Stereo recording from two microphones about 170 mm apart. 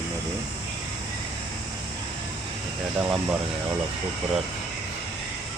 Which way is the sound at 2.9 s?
10° right (ahead or behind).